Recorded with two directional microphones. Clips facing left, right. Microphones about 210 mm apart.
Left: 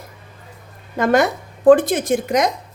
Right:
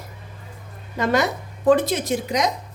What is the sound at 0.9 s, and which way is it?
A woman's voice, 50° left (ahead or behind).